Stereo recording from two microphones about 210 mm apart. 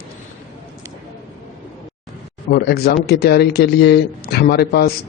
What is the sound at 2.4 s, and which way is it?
Speech, 50° left (ahead or behind).